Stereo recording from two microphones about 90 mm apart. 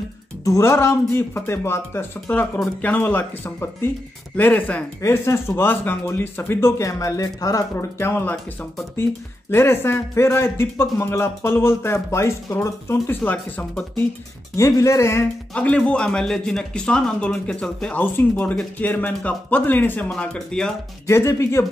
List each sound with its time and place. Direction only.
0.4 s a man's voice: 35° left (ahead or behind); by 4.8 s 15° left (ahead or behind)
5.0 s a man's voice: 30° left (ahead or behind)
9.5 s a man's voice: 25° left (ahead or behind)
14.5 s speech: 35° left (ahead or behind)
15.5 s speech: 10° left (ahead or behind)
18.1 s a man's voice: 20° left (ahead or behind)
20.1 s speech: 5° left (ahead or behind)
21.1 s speech: 30° left (ahead or behind)